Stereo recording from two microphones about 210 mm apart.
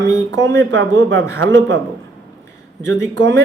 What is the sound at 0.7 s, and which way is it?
Speech, 60° right (ahead or behind).